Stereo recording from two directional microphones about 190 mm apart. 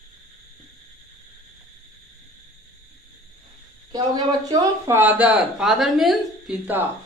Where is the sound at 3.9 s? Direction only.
20° right (ahead or behind).